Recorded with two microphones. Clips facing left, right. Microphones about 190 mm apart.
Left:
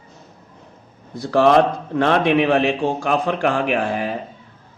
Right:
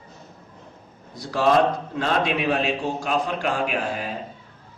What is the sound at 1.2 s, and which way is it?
A man's voice, 60° left (ahead or behind).